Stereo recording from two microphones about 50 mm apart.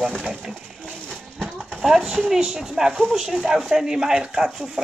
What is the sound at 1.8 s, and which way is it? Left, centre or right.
Speech, centre.